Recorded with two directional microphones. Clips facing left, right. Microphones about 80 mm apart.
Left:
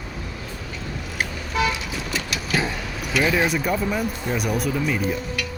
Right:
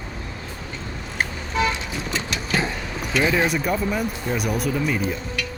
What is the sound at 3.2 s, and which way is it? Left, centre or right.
Speech, centre.